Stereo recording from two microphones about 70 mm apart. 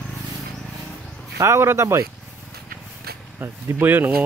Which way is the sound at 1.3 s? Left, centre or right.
Right.